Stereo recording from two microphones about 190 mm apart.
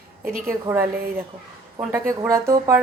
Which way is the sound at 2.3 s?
15° right (ahead or behind).